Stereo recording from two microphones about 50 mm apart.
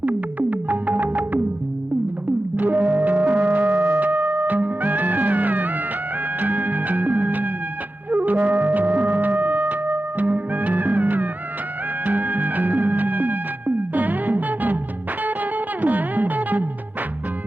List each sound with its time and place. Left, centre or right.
0.0 s music: right
2.6 s music: right